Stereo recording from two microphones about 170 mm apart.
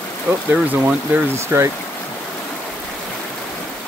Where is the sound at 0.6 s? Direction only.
5° right (ahead or behind).